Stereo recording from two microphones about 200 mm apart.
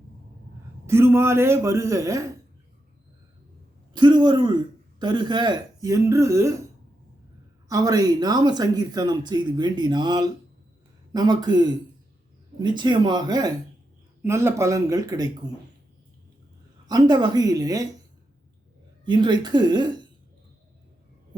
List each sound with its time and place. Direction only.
0.9 s speech: 10° right (ahead or behind)
3.9 s a man's voice: 20° right (ahead or behind)
7.7 s speech: 20° right (ahead or behind)
16.8 s speech: 20° right (ahead or behind)
19.0 s speech: 25° right (ahead or behind)